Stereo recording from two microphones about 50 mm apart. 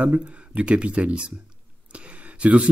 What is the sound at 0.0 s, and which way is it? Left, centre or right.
Speech, right.